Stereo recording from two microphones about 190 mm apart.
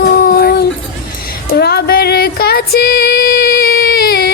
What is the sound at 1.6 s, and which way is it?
Child singing, 55° left (ahead or behind).